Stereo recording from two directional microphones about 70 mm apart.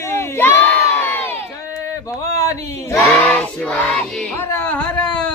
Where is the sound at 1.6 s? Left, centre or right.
Left.